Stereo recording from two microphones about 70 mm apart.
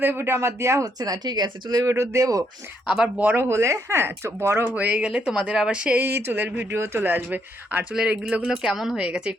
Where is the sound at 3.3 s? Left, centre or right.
Right.